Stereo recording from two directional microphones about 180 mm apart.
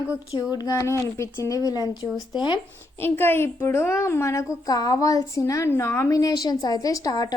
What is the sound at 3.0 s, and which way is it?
A woman's voice, 10° left (ahead or behind).